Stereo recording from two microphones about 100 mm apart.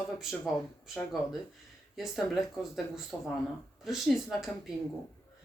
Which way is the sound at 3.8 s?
Centre (ahead or behind).